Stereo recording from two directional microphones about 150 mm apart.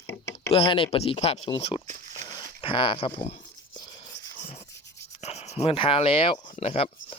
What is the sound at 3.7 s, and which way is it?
Whispering, 30° left (ahead or behind).